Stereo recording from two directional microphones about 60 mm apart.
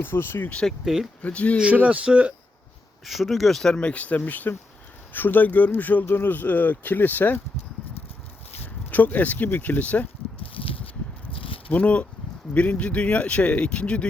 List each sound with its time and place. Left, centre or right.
0.0 s speech: left
1.2 s speech: left
1.7 s speech: right
3.0 s speech: centre; by 4.2 s left
4.2 s speech: left
8.6 s speech: left
11.7 s speech: left